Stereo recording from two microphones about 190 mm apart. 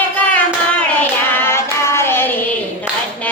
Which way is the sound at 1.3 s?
10° left (ahead or behind).